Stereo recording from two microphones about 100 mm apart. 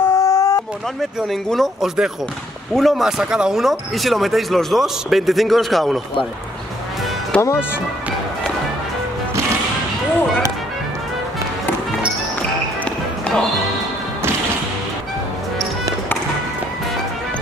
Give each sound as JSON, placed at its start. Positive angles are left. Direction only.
{"t": 0.0, "sound": "chicken", "side_deg": 30}
{"t": 1.5, "sound": "speech", "side_deg": 0}
{"t": 7.3, "sound": "speech", "side_deg": 10}